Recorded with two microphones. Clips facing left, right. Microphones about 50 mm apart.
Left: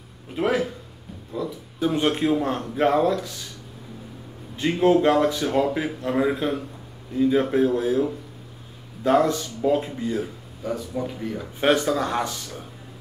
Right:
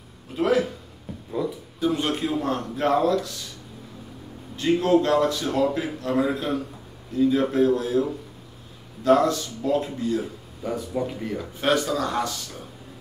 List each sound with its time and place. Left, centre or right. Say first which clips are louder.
0.4 s speech: right 1 dB; centre
1.4 s speech: right 2 dB; centre
1.8 s speech: left 2 dB; left
4.6 s speech: left 1 dB; centre
9.0 s speech: right 1 dB; centre
10.6 s speech: right 1 dB; centre
11.6 s speech: left 2 dB; left